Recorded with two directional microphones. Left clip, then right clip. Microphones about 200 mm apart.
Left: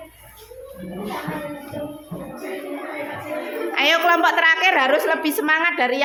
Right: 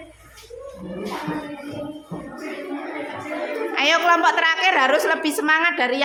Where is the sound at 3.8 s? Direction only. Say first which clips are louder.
Left 1 dB; centre (ahead or behind).